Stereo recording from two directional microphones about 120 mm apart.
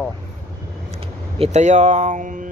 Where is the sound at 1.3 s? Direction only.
55° right (ahead or behind).